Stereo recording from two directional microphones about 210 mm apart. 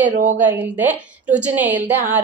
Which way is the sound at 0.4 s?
10° right (ahead or behind).